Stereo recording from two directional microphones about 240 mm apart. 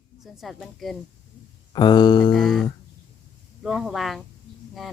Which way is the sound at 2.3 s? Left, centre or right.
Centre.